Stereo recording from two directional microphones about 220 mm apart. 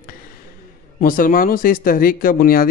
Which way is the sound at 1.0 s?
40° left (ahead or behind).